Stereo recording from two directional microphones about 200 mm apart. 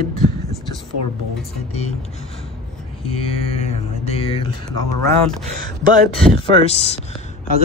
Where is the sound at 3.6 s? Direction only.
30° left (ahead or behind).